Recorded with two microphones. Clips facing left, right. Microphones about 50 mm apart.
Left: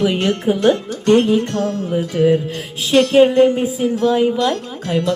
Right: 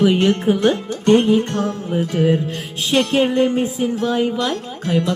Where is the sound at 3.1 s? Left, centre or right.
Centre.